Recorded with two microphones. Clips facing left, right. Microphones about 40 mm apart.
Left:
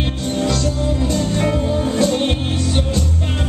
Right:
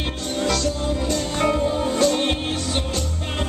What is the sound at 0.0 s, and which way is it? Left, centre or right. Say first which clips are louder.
Music: left 4 dB; centre.